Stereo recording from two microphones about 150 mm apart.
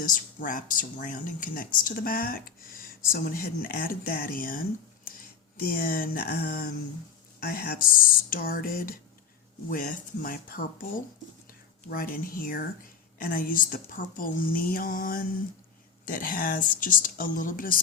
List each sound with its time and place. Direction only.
0.0 s speech: 65° left (ahead or behind)